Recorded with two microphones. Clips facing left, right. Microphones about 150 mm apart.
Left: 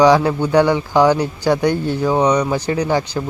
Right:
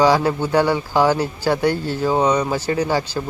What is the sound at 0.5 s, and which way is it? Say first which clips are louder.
Speech: left 4 dB; 15° left (ahead or behind).